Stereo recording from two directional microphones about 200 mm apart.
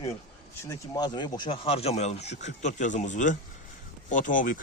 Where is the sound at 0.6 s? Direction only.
15° left (ahead or behind).